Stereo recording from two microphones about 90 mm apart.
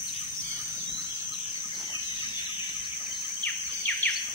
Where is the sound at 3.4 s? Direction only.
15° left (ahead or behind).